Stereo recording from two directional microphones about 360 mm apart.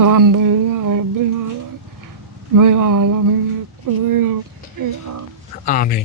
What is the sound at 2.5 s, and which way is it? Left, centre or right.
Speech, right.